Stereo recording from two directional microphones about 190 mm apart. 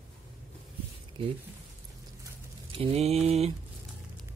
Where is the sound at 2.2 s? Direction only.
30° right (ahead or behind).